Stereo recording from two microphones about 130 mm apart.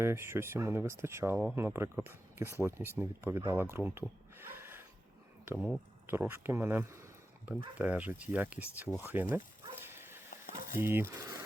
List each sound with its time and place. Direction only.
0.0 s speech: 20° right (ahead or behind)
4.0 s a sound: 15° right (ahead or behind)
5.5 s speech: 10° right (ahead or behind)
9.8 s dog: 20° right (ahead or behind)
10.8 s speech: 20° right (ahead or behind)